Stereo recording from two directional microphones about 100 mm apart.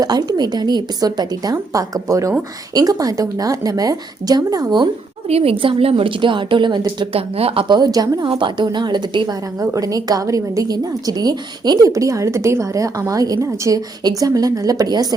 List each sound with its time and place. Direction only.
0.0 s a woman's voice: 40° right (ahead or behind)
5.3 s a woman's voice: 75° right (ahead or behind); by 7.1 s 50° right (ahead or behind)
7.1 s speech: 80° right; by 7.8 s 65° right (ahead or behind)
7.8 s a woman's voice: 40° right (ahead or behind)
8.2 s a woman's voice: 55° right (ahead or behind)